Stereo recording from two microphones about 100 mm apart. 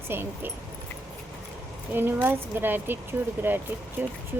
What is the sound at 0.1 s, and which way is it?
Speech, 25° right (ahead or behind).